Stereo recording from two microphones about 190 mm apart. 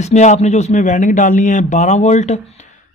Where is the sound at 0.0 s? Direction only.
35° left (ahead or behind).